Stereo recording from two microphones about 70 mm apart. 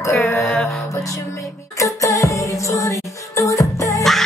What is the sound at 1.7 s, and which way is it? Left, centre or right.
Music, left.